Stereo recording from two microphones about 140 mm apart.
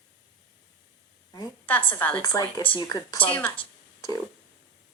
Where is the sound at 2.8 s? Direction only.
25° left (ahead or behind).